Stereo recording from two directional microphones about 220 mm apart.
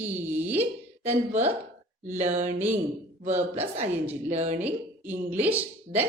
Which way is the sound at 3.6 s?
30° right (ahead or behind).